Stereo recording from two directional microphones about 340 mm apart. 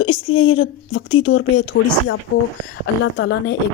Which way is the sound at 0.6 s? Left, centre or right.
Left.